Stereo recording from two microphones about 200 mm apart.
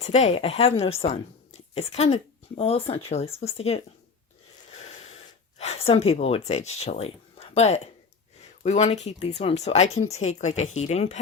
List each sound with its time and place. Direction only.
0.0 s speech: 35° left (ahead or behind)
4.7 s gasp: 35° left (ahead or behind)
8.6 s speech: 35° left (ahead or behind)